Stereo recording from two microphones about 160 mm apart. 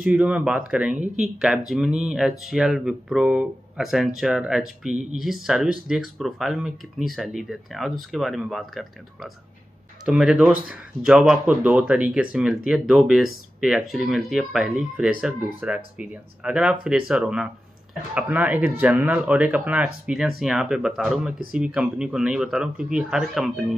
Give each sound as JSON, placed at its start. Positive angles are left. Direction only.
{"t": 0.0, "sound": "speech", "side_deg": -5}